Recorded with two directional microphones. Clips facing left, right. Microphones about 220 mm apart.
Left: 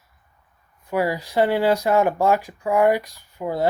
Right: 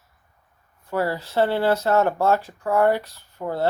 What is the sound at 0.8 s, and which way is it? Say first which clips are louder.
Speech: left 2 dB; 15° left (ahead or behind).